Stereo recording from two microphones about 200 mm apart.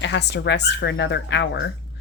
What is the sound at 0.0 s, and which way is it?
Speech, 60° left (ahead or behind).